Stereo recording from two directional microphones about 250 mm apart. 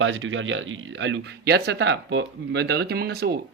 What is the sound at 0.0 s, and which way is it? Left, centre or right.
Speech, right.